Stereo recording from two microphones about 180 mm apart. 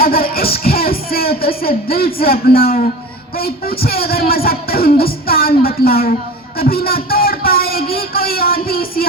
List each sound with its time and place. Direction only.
0.0 s speech: 55° left (ahead or behind)
6.6 s a sound: 55° left (ahead or behind)
7.9 s speech: 55° left (ahead or behind)